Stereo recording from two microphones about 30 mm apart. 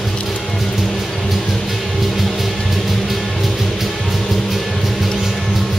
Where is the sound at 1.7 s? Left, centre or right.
Centre.